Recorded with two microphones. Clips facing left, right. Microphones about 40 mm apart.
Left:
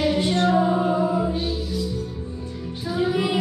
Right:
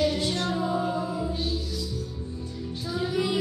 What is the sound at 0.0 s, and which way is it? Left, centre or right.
Music, left.